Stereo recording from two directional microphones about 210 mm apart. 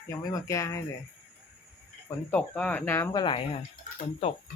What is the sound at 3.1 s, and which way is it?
Speech, 25° left (ahead or behind).